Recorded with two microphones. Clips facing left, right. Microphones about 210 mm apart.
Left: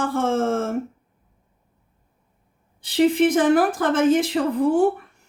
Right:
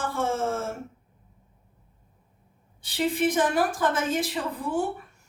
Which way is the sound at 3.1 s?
55° left (ahead or behind).